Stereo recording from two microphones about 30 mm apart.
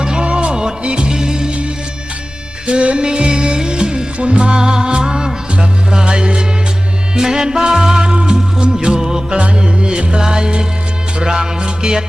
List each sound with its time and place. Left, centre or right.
0.0 s music: right
2.6 s music: right
7.2 s music: centre